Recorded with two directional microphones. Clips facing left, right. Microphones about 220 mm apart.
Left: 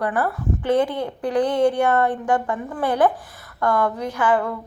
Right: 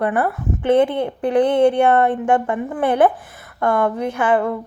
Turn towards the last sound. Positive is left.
turn(degrees=-25)  # may be behind; listen again after turning